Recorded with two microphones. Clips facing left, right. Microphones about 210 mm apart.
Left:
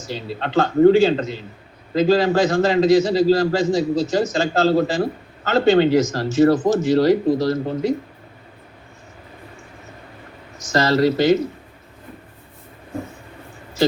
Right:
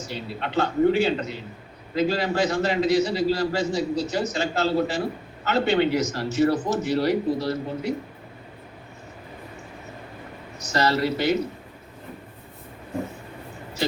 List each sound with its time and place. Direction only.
0.1 s a man's voice: 90° left
10.7 s a man's voice: 90° left